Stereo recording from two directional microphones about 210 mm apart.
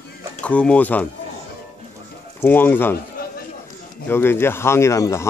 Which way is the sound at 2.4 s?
10° left (ahead or behind).